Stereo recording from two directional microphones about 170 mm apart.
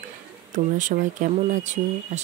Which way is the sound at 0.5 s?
50° right (ahead or behind).